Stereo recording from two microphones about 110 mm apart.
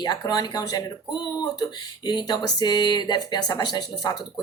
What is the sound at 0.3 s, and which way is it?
Speech, 35° left (ahead or behind).